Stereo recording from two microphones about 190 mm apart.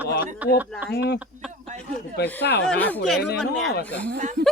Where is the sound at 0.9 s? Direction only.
60° left (ahead or behind).